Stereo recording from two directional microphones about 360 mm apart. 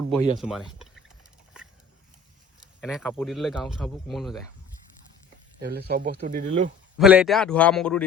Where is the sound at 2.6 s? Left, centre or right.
Centre.